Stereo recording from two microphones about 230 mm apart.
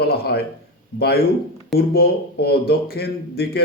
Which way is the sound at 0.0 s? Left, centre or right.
Left.